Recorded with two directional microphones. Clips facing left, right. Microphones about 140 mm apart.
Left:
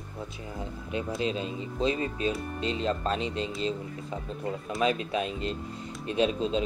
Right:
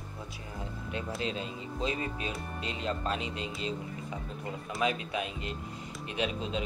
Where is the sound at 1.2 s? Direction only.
20° left (ahead or behind).